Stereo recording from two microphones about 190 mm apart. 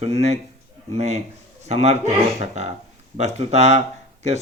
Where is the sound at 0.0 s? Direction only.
35° right (ahead or behind).